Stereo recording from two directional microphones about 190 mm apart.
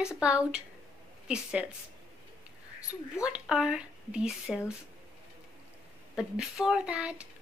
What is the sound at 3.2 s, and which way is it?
Speech, 5° right (ahead or behind).